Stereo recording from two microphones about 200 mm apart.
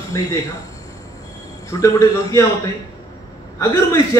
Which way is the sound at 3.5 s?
15° left (ahead or behind).